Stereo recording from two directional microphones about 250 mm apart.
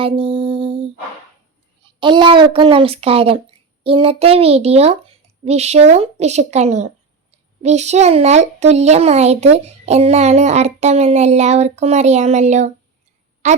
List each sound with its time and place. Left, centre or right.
0.0 s a child's voice: right
2.0 s a child's voice: centre